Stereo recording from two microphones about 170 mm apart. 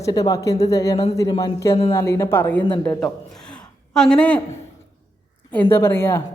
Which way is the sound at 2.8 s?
5° left (ahead or behind).